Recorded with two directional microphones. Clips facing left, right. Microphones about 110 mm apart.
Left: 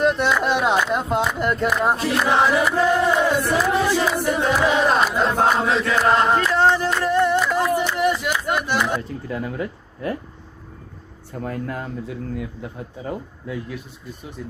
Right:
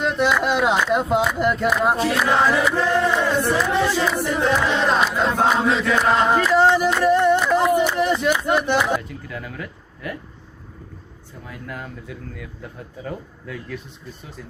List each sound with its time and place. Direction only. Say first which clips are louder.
0.0 s speech: left 1 dB; centre (ahead or behind)
2.3 s chant: left 2 dB; 10° left (ahead or behind); by 7.9 s 20° right (ahead or behind)
7.9 s speech: right 2 dB; 25° right (ahead or behind)
9.0 s speech: left 5 dB; 30° left (ahead or behind)
11.4 s speech: left 10 dB; 45° left (ahead or behind)
11.7 s speech: left 5 dB; 30° left (ahead or behind)